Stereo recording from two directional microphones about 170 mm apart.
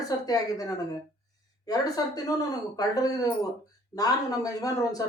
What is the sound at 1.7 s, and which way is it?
A woman's voice, 20° left (ahead or behind).